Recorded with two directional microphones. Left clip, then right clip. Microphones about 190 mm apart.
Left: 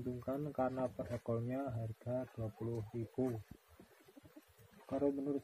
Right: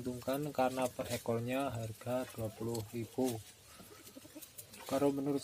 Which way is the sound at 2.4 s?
60° right (ahead or behind).